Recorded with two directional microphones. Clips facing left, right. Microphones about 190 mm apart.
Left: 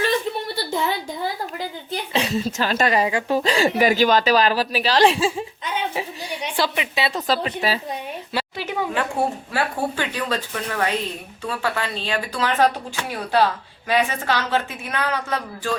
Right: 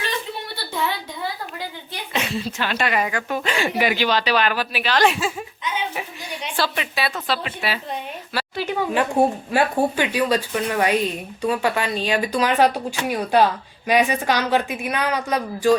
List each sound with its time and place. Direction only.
2.1 s a woman's voice: 40° left (ahead or behind)
6.6 s a woman's voice: 20° left (ahead or behind)
7.3 s a woman's voice: 40° left (ahead or behind)
8.3 s a sound: 20° left (ahead or behind)
9.2 s speech: 15° right (ahead or behind)